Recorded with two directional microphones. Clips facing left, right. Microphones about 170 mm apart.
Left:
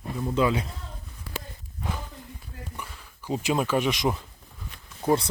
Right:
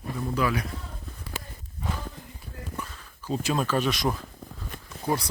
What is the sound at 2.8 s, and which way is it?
Speech, 15° left (ahead or behind).